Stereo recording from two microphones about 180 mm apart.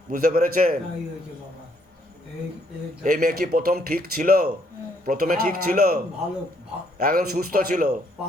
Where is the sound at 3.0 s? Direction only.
50° right (ahead or behind).